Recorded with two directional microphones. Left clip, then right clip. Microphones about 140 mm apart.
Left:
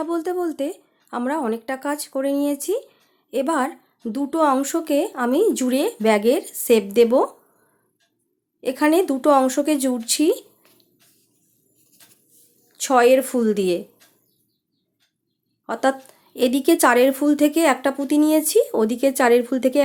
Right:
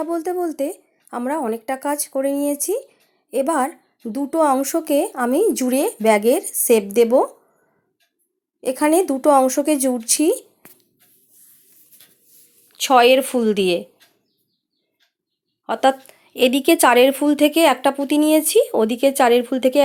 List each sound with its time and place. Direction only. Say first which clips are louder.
0.0 s speech: right 1 dB; 15° right (ahead or behind)
8.6 s speech: right 1 dB; 25° right (ahead or behind)
12.7 s speech: right 2 dB; 15° right (ahead or behind)
15.6 s speech: right 4 dB; 15° right (ahead or behind)